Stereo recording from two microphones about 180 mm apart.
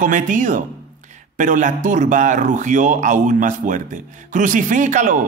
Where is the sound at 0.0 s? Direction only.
45° right (ahead or behind).